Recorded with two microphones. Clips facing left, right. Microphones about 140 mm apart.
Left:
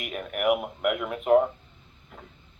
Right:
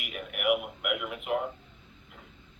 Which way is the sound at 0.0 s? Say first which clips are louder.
Left 5 dB; 40° left (ahead or behind).